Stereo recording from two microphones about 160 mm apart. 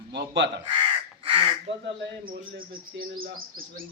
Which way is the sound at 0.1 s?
90° right.